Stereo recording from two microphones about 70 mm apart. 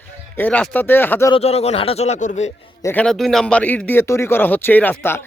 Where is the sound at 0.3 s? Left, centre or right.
Left.